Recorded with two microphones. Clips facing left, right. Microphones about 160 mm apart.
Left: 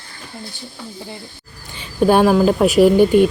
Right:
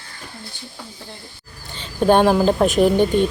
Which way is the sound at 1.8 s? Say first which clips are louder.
Left 1 dB; 5° left (ahead or behind).